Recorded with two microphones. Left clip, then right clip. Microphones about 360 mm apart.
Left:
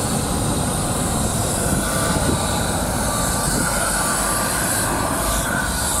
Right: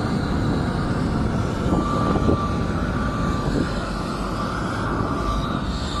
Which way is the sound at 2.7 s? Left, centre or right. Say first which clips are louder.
Left 4 dB; centre.